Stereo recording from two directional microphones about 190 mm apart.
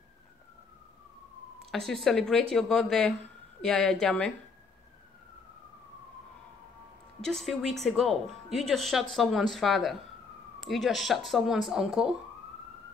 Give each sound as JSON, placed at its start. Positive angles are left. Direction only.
{"t": 1.7, "sound": "speech", "side_deg": 0}
{"t": 7.2, "sound": "speech", "side_deg": 0}